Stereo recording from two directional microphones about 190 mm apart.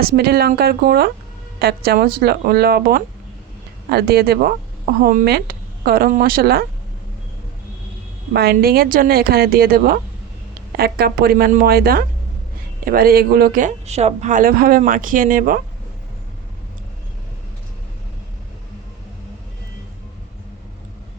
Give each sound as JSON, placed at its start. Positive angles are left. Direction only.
{"t": 0.0, "sound": "speech", "side_deg": -50}
{"t": 8.3, "sound": "speech", "side_deg": -55}